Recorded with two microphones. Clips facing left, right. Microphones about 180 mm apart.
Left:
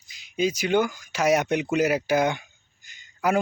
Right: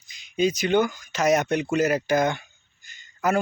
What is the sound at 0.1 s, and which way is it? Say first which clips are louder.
Speech: right 2 dB; 5° left (ahead or behind).